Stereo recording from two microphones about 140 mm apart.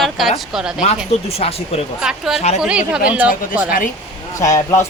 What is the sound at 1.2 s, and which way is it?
Speech, 45° left (ahead or behind).